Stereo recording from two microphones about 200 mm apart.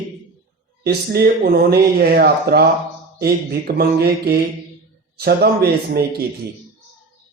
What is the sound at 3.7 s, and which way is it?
Speech, 50° right (ahead or behind).